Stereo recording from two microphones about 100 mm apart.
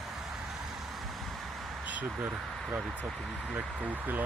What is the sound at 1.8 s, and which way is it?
Speech, 15° right (ahead or behind).